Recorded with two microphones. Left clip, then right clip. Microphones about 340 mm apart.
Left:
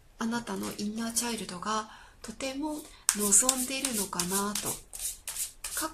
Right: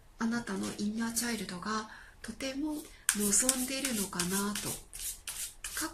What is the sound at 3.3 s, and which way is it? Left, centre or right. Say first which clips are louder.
Speech: left 4 dB; centre.